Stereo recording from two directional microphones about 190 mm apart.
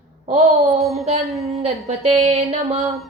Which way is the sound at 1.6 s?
35° right (ahead or behind).